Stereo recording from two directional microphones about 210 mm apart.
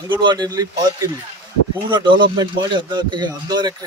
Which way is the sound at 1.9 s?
20° right (ahead or behind).